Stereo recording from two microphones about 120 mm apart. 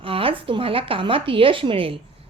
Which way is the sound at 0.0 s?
50° right (ahead or behind).